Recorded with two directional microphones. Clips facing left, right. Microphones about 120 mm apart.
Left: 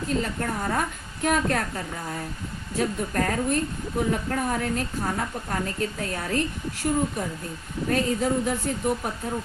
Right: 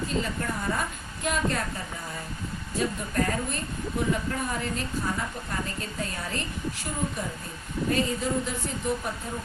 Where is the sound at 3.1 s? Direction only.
55° left (ahead or behind).